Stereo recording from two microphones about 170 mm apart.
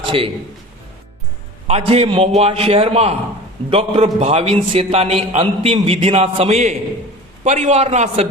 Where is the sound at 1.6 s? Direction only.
35° right (ahead or behind).